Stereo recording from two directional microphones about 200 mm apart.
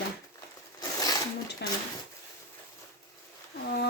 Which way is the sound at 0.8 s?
20° left (ahead or behind).